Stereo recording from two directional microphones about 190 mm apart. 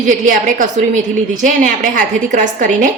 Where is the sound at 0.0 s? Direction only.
45° right (ahead or behind).